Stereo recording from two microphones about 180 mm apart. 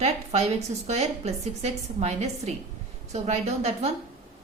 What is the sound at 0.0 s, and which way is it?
A woman's voice, 35° right (ahead or behind).